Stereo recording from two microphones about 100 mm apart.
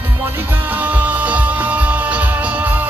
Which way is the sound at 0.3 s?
20° right (ahead or behind).